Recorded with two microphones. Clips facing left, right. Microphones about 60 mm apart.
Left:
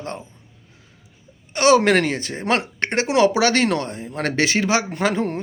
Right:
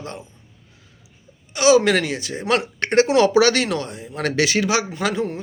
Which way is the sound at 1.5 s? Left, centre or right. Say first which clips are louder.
Even; left.